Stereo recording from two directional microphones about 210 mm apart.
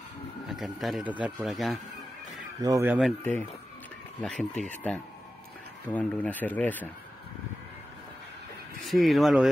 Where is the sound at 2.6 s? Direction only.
15° right (ahead or behind).